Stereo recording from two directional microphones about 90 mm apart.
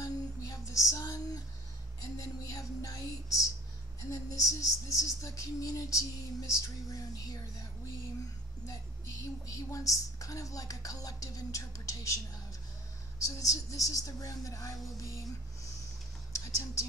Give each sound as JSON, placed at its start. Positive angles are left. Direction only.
{"t": 0.0, "sound": "a sound", "side_deg": 35}
{"t": 2.1, "sound": "a woman's voice", "side_deg": 40}
{"t": 8.6, "sound": "a woman's voice", "side_deg": 40}
{"t": 13.2, "sound": "a woman's voice", "side_deg": 40}